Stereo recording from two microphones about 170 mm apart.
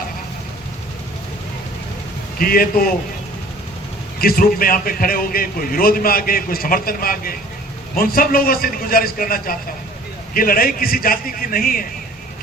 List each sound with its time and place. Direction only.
2.4 s a man's voice: 60° left (ahead or behind)
4.2 s a man's voice: 60° left (ahead or behind)